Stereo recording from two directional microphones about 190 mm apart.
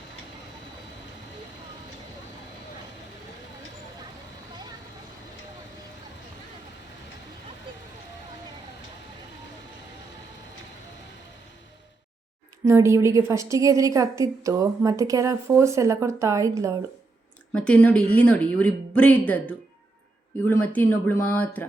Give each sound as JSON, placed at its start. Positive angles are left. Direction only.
{"t": 12.6, "sound": "a woman's voice", "side_deg": -15}
{"t": 17.5, "sound": "speech", "side_deg": 5}